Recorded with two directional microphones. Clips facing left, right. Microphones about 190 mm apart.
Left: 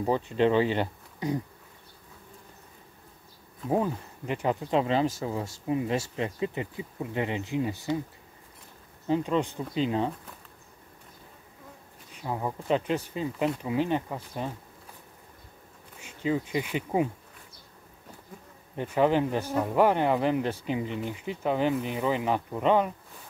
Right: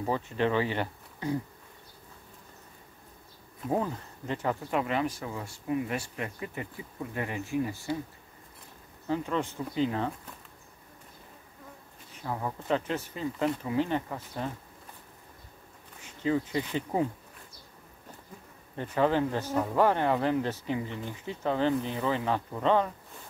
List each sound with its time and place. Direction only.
0.0 s speech: 20° left (ahead or behind)
3.6 s speech: 15° left (ahead or behind)
9.0 s speech: 20° left (ahead or behind)
12.2 s speech: 15° left (ahead or behind)
16.0 s speech: 15° left (ahead or behind)
18.8 s speech: 15° left (ahead or behind)